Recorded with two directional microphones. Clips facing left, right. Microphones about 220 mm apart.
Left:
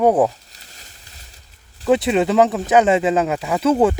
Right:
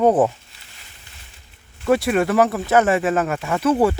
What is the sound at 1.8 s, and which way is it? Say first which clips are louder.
Speech: left 2 dB; 20° left (ahead or behind).